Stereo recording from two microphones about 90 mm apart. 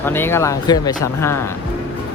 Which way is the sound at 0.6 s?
45° left (ahead or behind).